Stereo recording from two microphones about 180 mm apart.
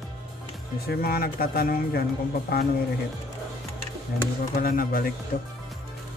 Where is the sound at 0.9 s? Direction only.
55° left (ahead or behind).